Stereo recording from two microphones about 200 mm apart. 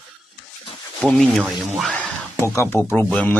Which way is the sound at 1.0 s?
5° left (ahead or behind).